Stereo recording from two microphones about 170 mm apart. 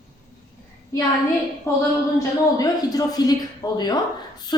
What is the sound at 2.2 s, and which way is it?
A woman's voice, 20° left (ahead or behind).